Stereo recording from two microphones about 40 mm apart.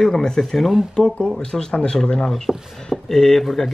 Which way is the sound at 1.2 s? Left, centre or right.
Centre.